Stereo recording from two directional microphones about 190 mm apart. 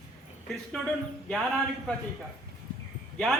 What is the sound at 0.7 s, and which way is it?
Speech, centre (ahead or behind).